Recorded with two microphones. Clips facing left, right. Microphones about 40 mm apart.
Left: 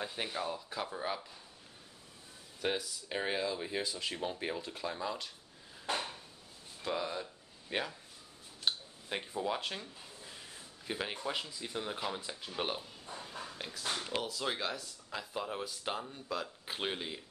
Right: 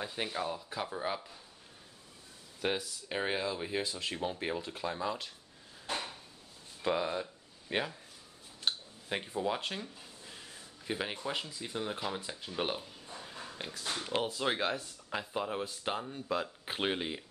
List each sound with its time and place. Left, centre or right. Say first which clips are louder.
0.0 s speech: right 2 dB; centre
2.6 s speech: right 1 dB; centre
6.8 s speech: right 4 dB; centre
8.6 s a sound: right 1 dB; centre
11.2 s speech: right 1 dB; centre
13.1 s a sound: left 2 dB; centre
13.6 s speech: right 1 dB; centre
13.9 s speech: right 6 dB; right
15.3 s speech: right 2 dB; centre